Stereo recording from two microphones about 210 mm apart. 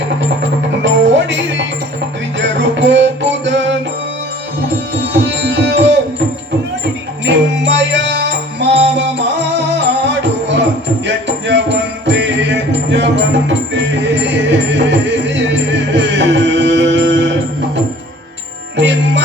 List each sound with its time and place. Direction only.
0.8 s music: 60° right (ahead or behind)
7.3 s music: 60° right (ahead or behind)
18.8 s music: 60° right (ahead or behind)